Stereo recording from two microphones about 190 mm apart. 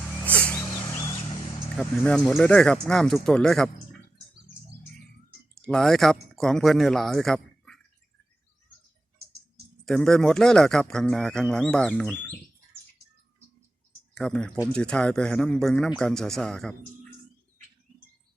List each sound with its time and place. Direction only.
0.3 s a sound: 5° left (ahead or behind)
1.1 s a sound: 30° left (ahead or behind)
1.7 s a man's voice: 5° left (ahead or behind)
5.6 s a man's voice: 5° left (ahead or behind)
9.8 s a man's voice: centre (ahead or behind)
14.2 s a man's voice: 5° left (ahead or behind)